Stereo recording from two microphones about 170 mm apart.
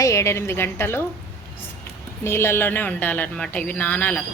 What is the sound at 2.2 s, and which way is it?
Speech, 15° left (ahead or behind).